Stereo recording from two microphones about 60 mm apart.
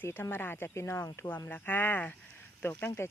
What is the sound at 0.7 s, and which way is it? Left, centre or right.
Speech, left.